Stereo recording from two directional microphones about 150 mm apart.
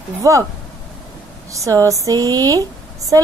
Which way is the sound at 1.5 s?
20° right (ahead or behind).